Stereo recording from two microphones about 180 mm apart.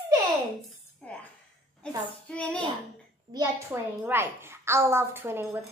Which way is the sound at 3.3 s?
20° right (ahead or behind).